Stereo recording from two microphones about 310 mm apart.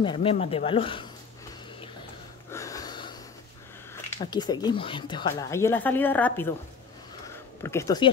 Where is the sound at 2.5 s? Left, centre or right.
Centre.